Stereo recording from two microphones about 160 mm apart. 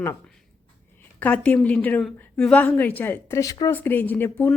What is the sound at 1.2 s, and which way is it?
Speech, 10° left (ahead or behind).